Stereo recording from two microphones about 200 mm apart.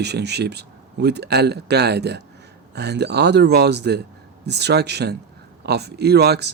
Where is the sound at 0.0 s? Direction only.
55° right (ahead or behind).